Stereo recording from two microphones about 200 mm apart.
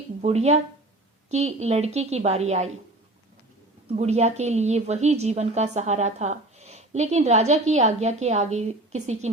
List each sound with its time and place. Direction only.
0.2 s a woman's voice: 35° right (ahead or behind)
3.8 s a woman's voice: 35° right (ahead or behind)